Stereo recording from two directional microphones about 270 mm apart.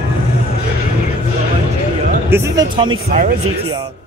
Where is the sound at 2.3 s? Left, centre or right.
Centre.